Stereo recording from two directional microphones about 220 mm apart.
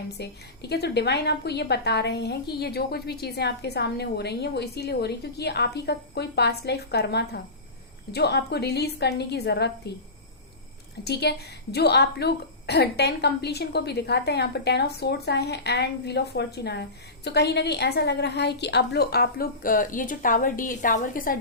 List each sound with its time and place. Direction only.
0.2 s a woman's voice: 50° left (ahead or behind)
11.0 s a woman's voice: 50° left (ahead or behind)